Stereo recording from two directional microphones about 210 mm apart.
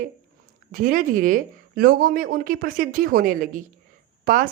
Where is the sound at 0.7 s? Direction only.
40° right (ahead or behind).